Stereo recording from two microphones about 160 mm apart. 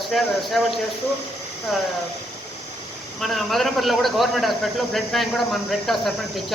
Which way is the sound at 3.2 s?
Centre (ahead or behind).